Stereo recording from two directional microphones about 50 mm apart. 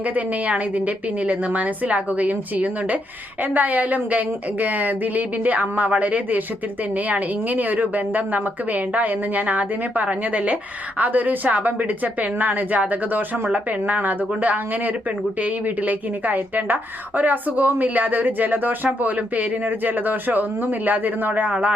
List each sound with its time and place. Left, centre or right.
0.4 s a woman's voice: right